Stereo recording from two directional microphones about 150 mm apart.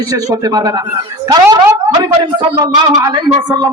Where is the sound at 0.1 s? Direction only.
25° right (ahead or behind).